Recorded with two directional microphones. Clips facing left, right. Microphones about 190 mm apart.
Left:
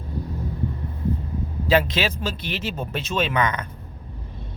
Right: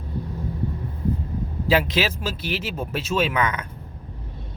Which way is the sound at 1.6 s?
10° right (ahead or behind).